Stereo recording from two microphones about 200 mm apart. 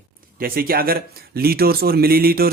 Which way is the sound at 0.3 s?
45° right (ahead or behind).